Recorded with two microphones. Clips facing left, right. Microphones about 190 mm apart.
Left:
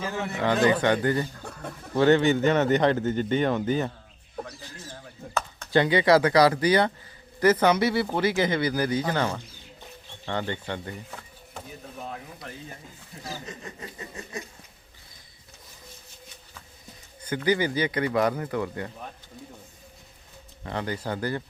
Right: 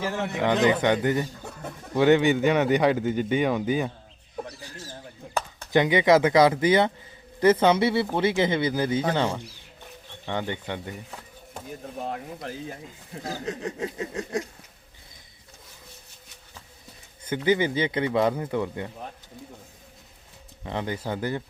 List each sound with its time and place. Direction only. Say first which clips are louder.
0.4 s speech: even; 20° right (ahead or behind)
1.4 s speech: even; 5° right (ahead or behind)
5.3 s speech: right 1 dB; 15° right (ahead or behind)
13.2 s chuckle: right 7 dB; 60° right (ahead or behind); by 14.4 s 85° right
17.2 s speech: right 2 dB; 20° right (ahead or behind)
20.7 s speech: right 1 dB; 20° right (ahead or behind)